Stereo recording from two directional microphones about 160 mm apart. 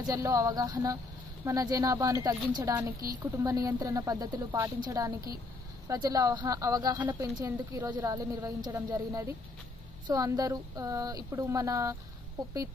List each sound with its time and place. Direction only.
0.0 s speech: 20° right (ahead or behind)
7.0 s speech: 10° right (ahead or behind)